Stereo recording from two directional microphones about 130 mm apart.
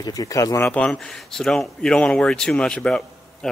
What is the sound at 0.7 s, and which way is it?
Speech, 5° left (ahead or behind).